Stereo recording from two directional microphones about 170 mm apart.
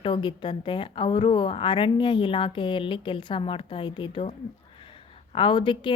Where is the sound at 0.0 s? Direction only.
30° left (ahead or behind).